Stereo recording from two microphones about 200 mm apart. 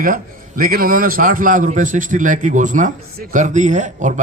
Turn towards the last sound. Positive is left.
turn(degrees=-40)  # may be behind; listen again after turning